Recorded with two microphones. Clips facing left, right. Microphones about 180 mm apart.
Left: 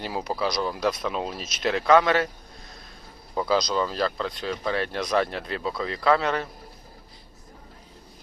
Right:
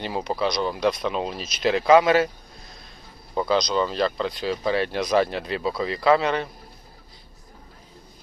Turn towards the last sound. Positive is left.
turn(degrees=0)  # may be behind; listen again after turning